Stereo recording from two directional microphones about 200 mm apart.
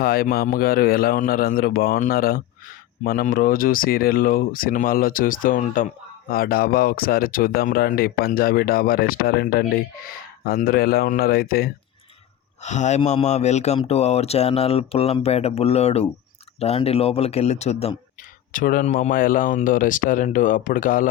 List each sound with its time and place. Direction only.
0.0 s speech: 50° left (ahead or behind)
12.6 s speech: 35° left (ahead or behind)
18.5 s speech: 40° left (ahead or behind)